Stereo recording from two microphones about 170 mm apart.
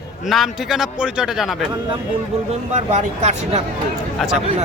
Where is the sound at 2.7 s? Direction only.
45° right (ahead or behind).